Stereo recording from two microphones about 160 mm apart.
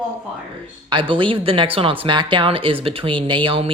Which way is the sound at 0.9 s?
30° right (ahead or behind).